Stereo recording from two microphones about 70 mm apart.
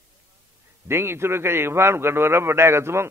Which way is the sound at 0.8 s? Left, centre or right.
Right.